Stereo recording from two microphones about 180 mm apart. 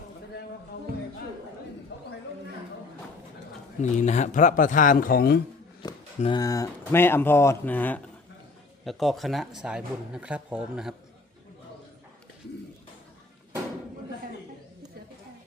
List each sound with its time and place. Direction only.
3.9 s speech: 40° left (ahead or behind); by 5.4 s 55° left (ahead or behind)
5.8 s speech: 25° left (ahead or behind); by 10.9 s 5° right (ahead or behind)